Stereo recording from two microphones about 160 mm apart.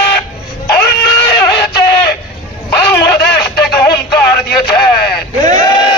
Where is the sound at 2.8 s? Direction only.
90° left.